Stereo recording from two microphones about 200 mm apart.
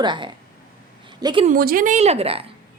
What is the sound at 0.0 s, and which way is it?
Speech, 25° right (ahead or behind).